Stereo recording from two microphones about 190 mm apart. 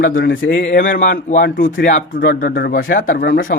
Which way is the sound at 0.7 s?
45° left (ahead or behind).